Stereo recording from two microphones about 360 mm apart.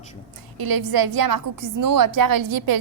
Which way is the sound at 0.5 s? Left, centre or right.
Right.